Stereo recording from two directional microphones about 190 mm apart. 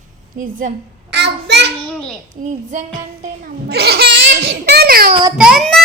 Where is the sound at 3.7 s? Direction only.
55° right (ahead or behind).